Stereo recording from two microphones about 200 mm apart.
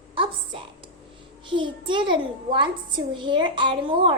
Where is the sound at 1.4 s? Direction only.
25° right (ahead or behind).